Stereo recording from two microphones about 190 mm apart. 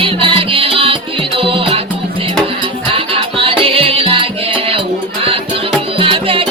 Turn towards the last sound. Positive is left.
turn(degrees=-30)  # may be behind; listen again after turning